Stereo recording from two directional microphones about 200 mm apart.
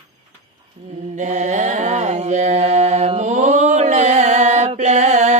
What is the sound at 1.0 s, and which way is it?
Mantra, 35° right (ahead or behind).